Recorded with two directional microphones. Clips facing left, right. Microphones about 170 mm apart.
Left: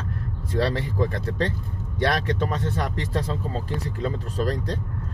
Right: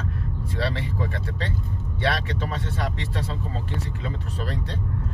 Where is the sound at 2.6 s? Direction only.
45° left (ahead or behind).